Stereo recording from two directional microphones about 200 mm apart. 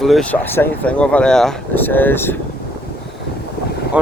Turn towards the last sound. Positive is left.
turn(degrees=-5)  # may be behind; listen again after turning